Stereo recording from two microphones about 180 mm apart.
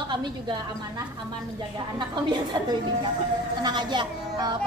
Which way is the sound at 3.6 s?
25° right (ahead or behind).